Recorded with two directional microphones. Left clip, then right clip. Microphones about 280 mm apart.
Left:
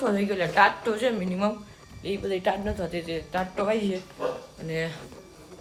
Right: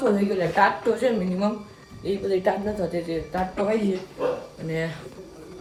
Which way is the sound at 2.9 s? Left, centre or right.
Left.